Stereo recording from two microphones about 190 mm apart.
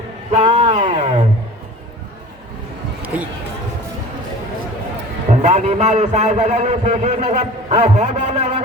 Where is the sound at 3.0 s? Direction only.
5° right (ahead or behind).